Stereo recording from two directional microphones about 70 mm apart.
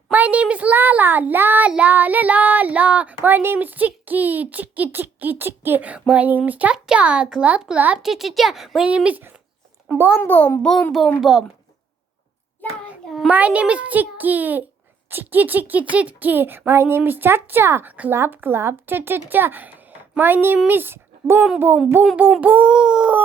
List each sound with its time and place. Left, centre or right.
0.1 s speech: right
3.2 s a child's voice: right
8.0 s speech: centre
9.0 s speech: right
10.2 s a child's voice: left
10.6 s speech: centre
11.2 s a child's voice: centre
13.3 s a woman's voice: centre
22.1 s a child's voice: centre